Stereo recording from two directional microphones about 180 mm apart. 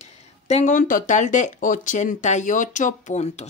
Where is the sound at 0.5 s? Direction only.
40° left (ahead or behind).